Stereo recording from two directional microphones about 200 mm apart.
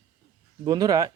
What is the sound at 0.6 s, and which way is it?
Speech, 20° right (ahead or behind).